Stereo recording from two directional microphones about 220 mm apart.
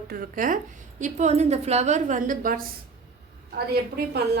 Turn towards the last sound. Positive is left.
turn(degrees=-45)  # may be behind; listen again after turning